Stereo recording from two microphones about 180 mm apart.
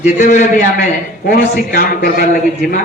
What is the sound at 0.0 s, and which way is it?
A man's voice, 45° left (ahead or behind).